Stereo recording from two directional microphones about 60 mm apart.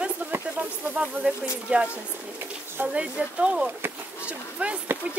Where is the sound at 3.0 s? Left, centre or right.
Centre.